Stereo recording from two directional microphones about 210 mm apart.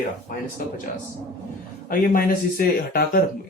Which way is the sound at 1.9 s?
45° left (ahead or behind).